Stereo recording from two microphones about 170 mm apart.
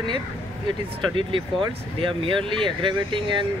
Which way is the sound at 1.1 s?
30° right (ahead or behind).